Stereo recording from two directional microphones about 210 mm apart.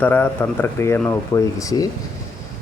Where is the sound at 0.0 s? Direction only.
10° left (ahead or behind).